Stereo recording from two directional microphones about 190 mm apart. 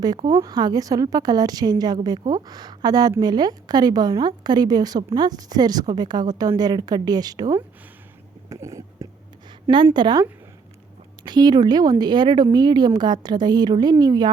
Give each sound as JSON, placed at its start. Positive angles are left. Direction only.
{"t": 0.0, "sound": "a woman's voice", "side_deg": -20}
{"t": 8.4, "sound": "a sound", "side_deg": -15}
{"t": 9.6, "sound": "a woman's voice", "side_deg": -25}